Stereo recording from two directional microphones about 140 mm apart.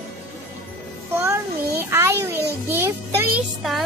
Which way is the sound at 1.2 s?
20° right (ahead or behind).